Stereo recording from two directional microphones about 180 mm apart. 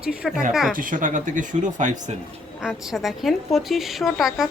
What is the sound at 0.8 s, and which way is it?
Speech, 45° right (ahead or behind).